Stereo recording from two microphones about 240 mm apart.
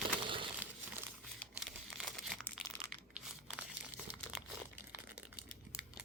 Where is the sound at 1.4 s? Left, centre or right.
Centre.